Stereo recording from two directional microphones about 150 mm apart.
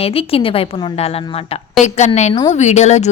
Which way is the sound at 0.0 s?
40° left (ahead or behind).